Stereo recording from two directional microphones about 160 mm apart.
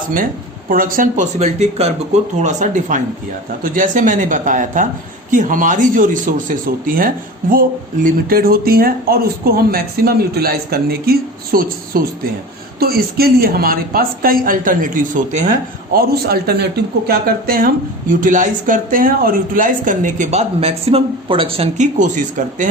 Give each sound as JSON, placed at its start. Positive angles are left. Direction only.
{"t": 0.7, "sound": "speech", "side_deg": -60}
{"t": 17.1, "sound": "speech", "side_deg": -70}